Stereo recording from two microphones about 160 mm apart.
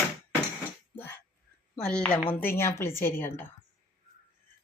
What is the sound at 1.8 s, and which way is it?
A woman's voice, 5° left (ahead or behind).